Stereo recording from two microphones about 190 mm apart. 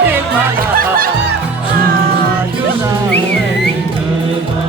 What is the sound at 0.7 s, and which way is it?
Music, 50° right (ahead or behind).